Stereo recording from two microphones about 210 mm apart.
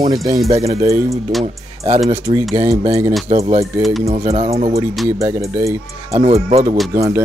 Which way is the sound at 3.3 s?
30° right (ahead or behind).